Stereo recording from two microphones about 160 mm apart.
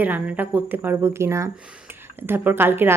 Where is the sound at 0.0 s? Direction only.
10° right (ahead or behind).